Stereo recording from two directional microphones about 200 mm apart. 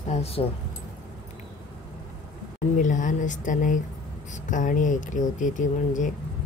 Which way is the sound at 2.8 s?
40° left (ahead or behind).